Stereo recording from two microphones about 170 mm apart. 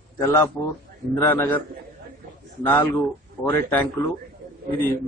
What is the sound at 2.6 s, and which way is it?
A man's voice, 10° left (ahead or behind).